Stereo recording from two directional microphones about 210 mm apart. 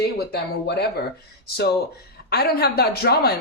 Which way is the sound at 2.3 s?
50° left (ahead or behind).